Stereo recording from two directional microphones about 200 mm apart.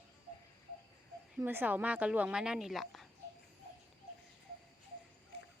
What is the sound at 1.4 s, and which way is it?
A woman's voice, 10° right (ahead or behind).